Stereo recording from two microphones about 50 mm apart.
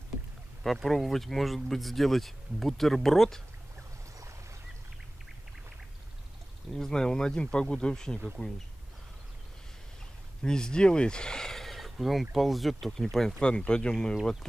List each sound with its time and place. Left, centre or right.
0.8 s speech: centre
6.7 s speech: centre
10.4 s speech: centre
13.4 s speech: centre